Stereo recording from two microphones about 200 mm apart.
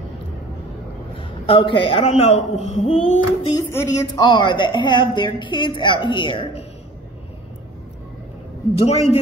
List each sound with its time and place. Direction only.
1.1 s a man's voice: 25° left (ahead or behind)
3.7 s a woman's voice: 15° left (ahead or behind)
8.7 s a woman's voice: 30° left (ahead or behind)